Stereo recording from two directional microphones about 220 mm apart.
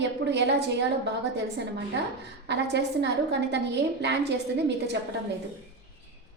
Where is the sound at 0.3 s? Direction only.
50° right (ahead or behind).